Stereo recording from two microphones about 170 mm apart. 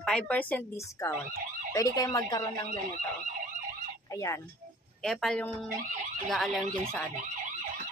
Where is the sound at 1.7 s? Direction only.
20° left (ahead or behind).